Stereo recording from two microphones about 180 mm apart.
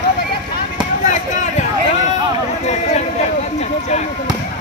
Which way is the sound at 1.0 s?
40° left (ahead or behind).